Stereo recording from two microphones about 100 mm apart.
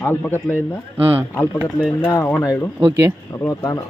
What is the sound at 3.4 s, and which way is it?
Speech, 35° left (ahead or behind).